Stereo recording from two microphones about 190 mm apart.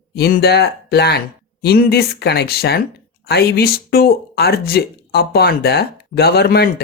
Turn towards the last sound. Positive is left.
turn(degrees=55)  # may be behind; listen again after turning